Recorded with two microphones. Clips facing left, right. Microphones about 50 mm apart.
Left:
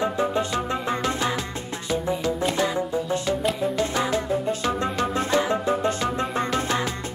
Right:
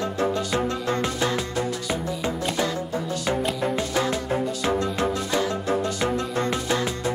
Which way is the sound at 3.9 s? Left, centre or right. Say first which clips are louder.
Even; left.